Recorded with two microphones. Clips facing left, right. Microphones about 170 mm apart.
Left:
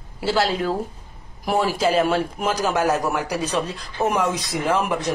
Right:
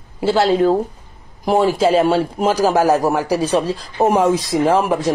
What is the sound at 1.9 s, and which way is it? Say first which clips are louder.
Speech: right 5 dB; 30° right (ahead or behind).